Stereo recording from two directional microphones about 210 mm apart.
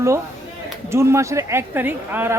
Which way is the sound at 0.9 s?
15° right (ahead or behind).